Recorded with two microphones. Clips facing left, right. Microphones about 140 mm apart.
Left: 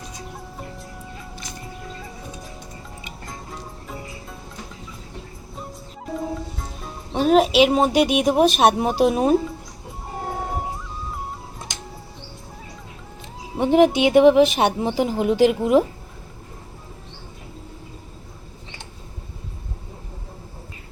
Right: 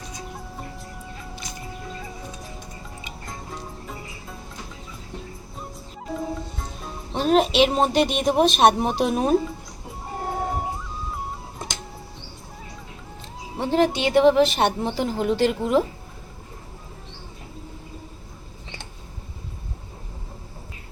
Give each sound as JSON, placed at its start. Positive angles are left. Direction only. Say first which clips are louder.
{"t": 3.2, "sound": "music", "louder": "even", "side_deg": 0}
{"t": 6.1, "sound": "speech", "louder": "left 2 dB", "side_deg": 0}
{"t": 13.6, "sound": "speech", "louder": "left 5 dB", "side_deg": 15}